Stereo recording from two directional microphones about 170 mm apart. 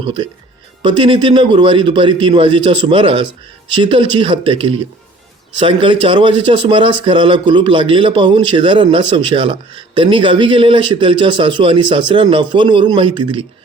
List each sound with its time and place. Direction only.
0.0 s speech: 30° right (ahead or behind)